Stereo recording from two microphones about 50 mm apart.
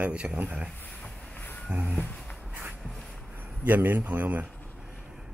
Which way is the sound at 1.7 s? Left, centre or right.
Right.